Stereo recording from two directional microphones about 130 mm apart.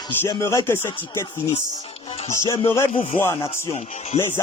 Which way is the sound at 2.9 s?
45° left (ahead or behind).